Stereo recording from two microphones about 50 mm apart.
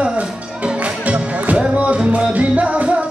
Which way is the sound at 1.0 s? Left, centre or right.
Right.